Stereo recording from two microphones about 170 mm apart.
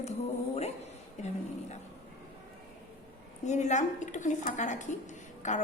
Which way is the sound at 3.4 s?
45° left (ahead or behind).